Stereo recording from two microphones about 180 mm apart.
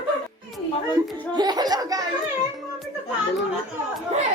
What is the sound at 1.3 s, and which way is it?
Speech, 25° right (ahead or behind).